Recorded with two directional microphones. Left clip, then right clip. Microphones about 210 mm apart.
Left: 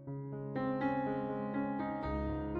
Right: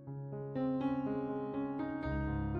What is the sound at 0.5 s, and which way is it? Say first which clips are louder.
Music: left 1 dB; centre (ahead or behind).